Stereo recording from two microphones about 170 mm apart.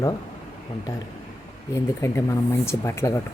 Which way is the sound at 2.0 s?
15° left (ahead or behind).